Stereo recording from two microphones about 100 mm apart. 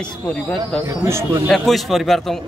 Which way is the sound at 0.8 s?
25° right (ahead or behind).